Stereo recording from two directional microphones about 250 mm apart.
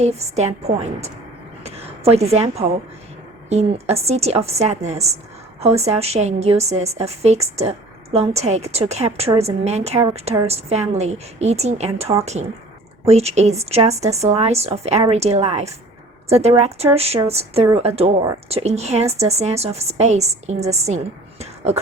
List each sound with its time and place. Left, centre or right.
0.0 s a woman's voice: right